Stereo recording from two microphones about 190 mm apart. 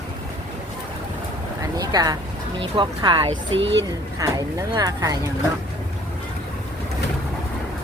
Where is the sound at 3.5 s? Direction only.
75° right (ahead or behind).